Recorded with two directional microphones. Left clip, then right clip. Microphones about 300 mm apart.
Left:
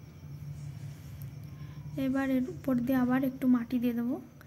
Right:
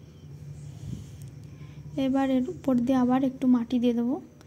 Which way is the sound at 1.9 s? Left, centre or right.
Centre.